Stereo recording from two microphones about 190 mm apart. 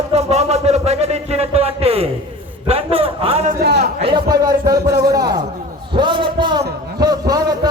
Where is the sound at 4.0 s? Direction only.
25° right (ahead or behind).